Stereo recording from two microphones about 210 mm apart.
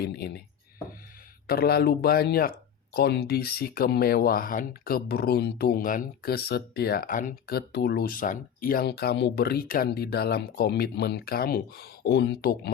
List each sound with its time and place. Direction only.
0.0 s speech: 50° left (ahead or behind)
1.5 s speech: 45° left (ahead or behind)